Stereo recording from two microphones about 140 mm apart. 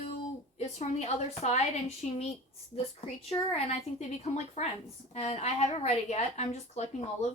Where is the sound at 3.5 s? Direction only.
45° left (ahead or behind).